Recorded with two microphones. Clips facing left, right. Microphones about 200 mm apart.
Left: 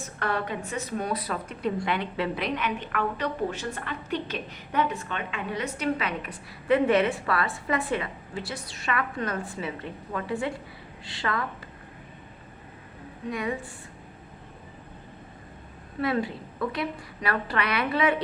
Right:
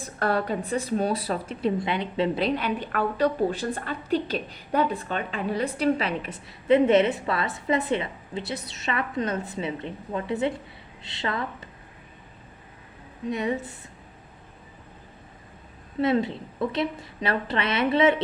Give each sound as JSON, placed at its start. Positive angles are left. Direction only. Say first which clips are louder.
{"t": 0.0, "sound": "a woman's voice", "louder": "right 4 dB", "side_deg": -35}
{"t": 13.3, "sound": "a woman's voice", "louder": "right 4 dB", "side_deg": -25}
{"t": 16.0, "sound": "a woman's voice", "louder": "right 4 dB", "side_deg": -25}